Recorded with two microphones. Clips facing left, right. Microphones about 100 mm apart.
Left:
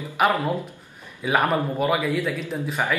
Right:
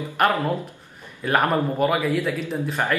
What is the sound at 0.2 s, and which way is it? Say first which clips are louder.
A man's voice: even; 5° left (ahead or behind).